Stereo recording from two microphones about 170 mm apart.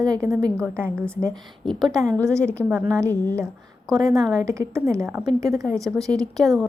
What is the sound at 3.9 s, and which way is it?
Speech, centre (ahead or behind).